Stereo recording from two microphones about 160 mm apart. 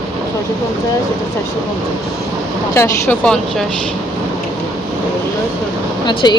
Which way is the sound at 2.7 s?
15° left (ahead or behind).